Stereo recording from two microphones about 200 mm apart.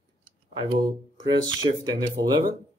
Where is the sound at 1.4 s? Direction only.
20° right (ahead or behind).